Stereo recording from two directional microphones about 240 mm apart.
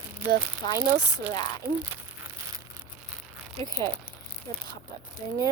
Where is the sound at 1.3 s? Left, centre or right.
Centre.